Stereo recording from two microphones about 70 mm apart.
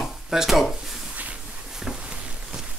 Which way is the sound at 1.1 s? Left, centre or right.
Centre.